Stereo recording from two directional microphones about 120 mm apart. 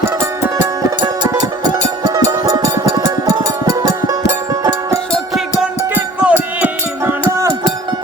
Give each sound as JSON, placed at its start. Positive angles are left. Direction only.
{"t": 0.0, "sound": "music", "side_deg": -20}
{"t": 5.1, "sound": "music", "side_deg": 0}
{"t": 5.9, "sound": "music", "side_deg": -15}